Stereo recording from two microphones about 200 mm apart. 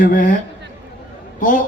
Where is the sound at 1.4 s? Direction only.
40° left (ahead or behind).